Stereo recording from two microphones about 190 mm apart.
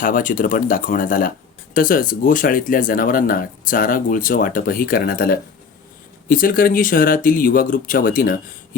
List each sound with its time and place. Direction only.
0.0 s speech: 45° left (ahead or behind)